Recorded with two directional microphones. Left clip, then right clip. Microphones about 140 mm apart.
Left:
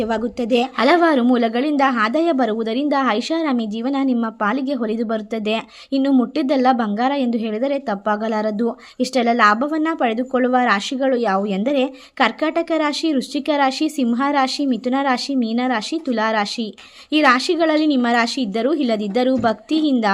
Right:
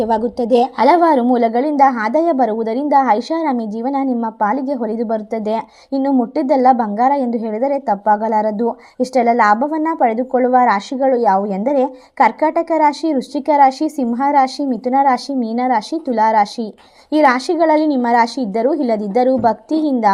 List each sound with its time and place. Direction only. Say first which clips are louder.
0.0 s a woman's voice: right 5 dB; 5° left (ahead or behind)
3.8 s a woman's voice: right 3 dB; 45° left (ahead or behind)
4.1 s a woman's voice: right 3 dB; 15° left (ahead or behind)
7.5 s a woman's voice: right 5 dB; 40° left (ahead or behind)
7.9 s a woman's voice: right 6 dB; 15° left (ahead or behind)
9.6 s a woman's voice: right 2 dB; 40° left (ahead or behind)
9.9 s a woman's voice: right 4 dB; 15° left (ahead or behind)